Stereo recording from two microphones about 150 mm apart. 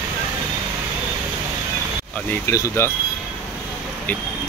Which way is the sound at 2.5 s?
20° left (ahead or behind).